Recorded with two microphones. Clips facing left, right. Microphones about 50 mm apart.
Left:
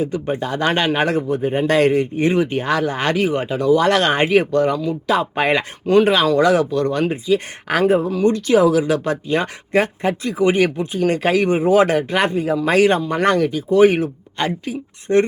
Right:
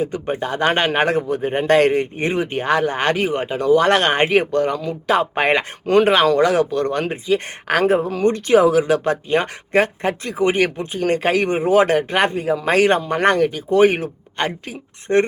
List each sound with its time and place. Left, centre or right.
0.0 s speech: right
1.3 s speech: right
2.2 s speech: right
2.6 s speech: right